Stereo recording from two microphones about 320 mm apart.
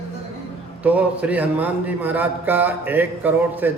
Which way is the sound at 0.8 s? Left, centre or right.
Centre.